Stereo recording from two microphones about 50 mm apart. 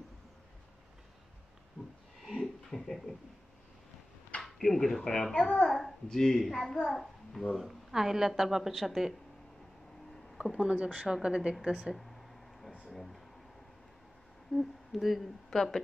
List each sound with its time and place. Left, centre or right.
2.2 s a sound: centre
4.4 s speech: centre
5.4 s a child's voice: left
5.7 s a child's voice: centre
10.3 s speech: centre
10.7 s speech: right
11.2 s a woman's voice: centre
11.9 s a sound: centre
14.5 s a woman's voice: centre